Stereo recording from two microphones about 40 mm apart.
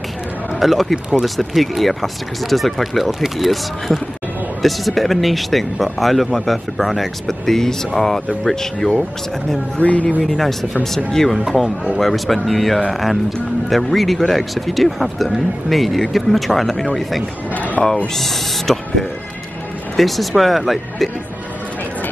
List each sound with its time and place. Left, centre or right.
0.6 s speech: centre
9.8 s speech: left
10.2 s speech: centre
17.8 s speech: centre